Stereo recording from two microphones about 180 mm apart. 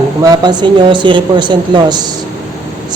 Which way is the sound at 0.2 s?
20° right (ahead or behind).